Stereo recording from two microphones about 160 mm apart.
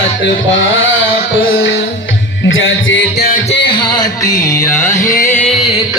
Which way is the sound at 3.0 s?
80° left.